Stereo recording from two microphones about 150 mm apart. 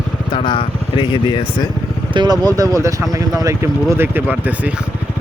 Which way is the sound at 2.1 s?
25° right (ahead or behind).